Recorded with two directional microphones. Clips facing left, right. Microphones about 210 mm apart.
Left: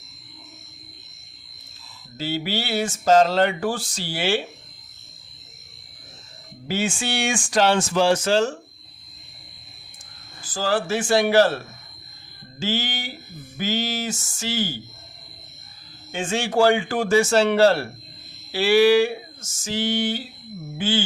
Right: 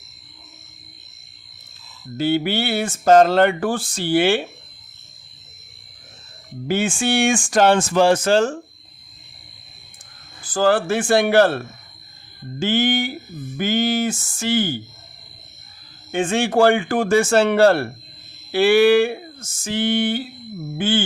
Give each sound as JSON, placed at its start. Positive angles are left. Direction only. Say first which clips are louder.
{"t": 2.1, "sound": "speech", "louder": "right 7 dB", "side_deg": -55}
{"t": 6.7, "sound": "speech", "louder": "right 5 dB", "side_deg": -55}
{"t": 10.4, "sound": "speech", "louder": "right 6 dB", "side_deg": -55}
{"t": 12.5, "sound": "a sound", "louder": "right 8 dB", "side_deg": -55}
{"t": 13.6, "sound": "speech", "louder": "right 6 dB", "side_deg": -55}
{"t": 16.1, "sound": "speech", "louder": "right 4 dB", "side_deg": -55}